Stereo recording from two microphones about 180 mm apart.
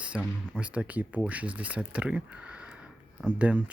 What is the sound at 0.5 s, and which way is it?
Speech, 5° right (ahead or behind).